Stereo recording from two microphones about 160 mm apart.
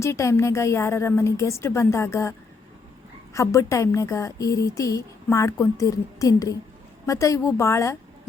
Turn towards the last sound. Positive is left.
turn(degrees=20)  # may be behind; listen again after turning